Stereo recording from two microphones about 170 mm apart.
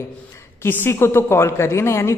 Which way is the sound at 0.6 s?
15° left (ahead or behind).